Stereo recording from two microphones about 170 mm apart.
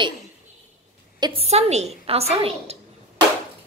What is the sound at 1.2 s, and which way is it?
A woman's voice, 35° right (ahead or behind).